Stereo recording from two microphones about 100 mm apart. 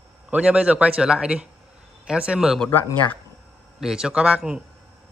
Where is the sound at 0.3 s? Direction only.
10° right (ahead or behind).